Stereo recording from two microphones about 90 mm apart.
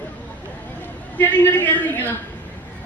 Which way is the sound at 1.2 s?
20° left (ahead or behind).